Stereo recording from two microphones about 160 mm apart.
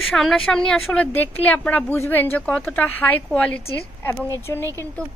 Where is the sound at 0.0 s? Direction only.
Centre (ahead or behind).